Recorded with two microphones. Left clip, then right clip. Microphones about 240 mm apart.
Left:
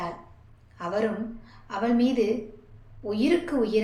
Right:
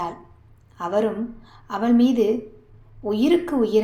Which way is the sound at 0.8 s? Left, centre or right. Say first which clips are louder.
Right 6 dB; right.